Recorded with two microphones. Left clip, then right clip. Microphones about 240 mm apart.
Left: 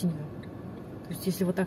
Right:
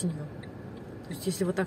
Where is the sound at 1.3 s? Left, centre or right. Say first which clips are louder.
Even; centre.